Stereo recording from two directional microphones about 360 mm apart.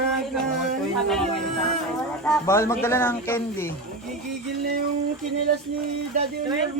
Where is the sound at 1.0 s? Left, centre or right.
Centre.